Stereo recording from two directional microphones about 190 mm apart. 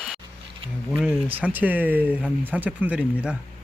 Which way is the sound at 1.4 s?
10° right (ahead or behind).